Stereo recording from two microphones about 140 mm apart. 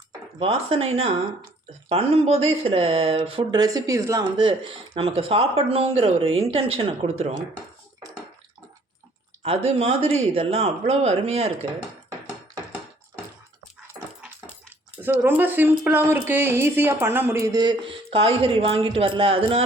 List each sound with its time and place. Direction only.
0.3 s speech: 40° right (ahead or behind); by 4.3 s 20° right (ahead or behind)
4.4 s speech: 35° right (ahead or behind)
9.4 s speech: 45° right (ahead or behind)
15.0 s speech: 15° right (ahead or behind); by 19.6 s 40° right (ahead or behind)